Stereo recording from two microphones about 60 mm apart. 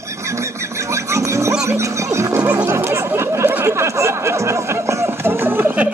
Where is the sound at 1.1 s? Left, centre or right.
Right.